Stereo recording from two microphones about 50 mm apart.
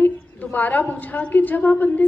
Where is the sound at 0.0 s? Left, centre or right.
Left.